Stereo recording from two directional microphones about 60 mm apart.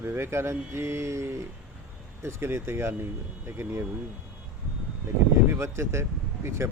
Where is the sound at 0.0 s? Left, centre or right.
Right.